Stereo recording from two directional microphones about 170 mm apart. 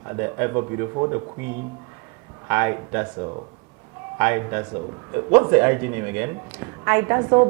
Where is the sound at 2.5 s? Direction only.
15° right (ahead or behind).